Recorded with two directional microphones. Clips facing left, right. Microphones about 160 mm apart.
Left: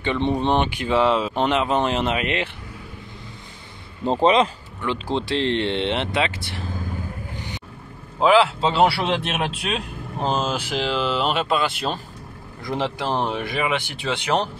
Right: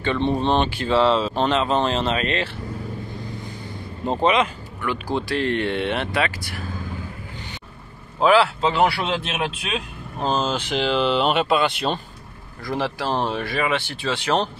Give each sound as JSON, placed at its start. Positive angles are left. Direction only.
{"t": 0.0, "sound": "speech", "side_deg": 20}
{"t": 4.0, "sound": "speech", "side_deg": 30}
{"t": 8.2, "sound": "speech", "side_deg": 20}
{"t": 10.1, "sound": "speech", "side_deg": 15}
{"t": 12.6, "sound": "speech", "side_deg": 20}